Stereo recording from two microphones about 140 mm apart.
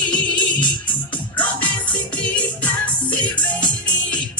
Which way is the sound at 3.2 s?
30° left (ahead or behind).